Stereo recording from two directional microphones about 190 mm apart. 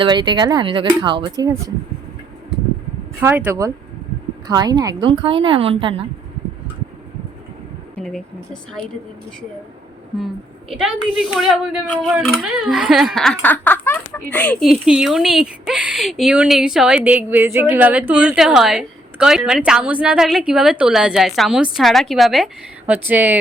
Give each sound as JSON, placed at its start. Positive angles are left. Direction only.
{"t": 0.0, "sound": "speech", "side_deg": -25}
{"t": 3.2, "sound": "speech", "side_deg": -10}
{"t": 7.9, "sound": "speech", "side_deg": 5}
{"t": 10.7, "sound": "speech", "side_deg": 0}